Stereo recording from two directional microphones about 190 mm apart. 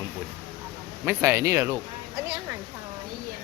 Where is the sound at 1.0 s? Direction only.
15° right (ahead or behind).